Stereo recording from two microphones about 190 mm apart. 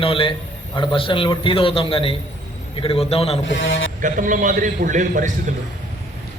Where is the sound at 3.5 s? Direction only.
80° left.